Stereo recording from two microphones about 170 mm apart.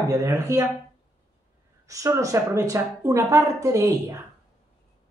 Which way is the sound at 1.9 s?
20° right (ahead or behind).